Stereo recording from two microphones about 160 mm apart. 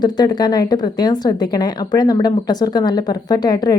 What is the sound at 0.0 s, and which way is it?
Speech, 25° left (ahead or behind).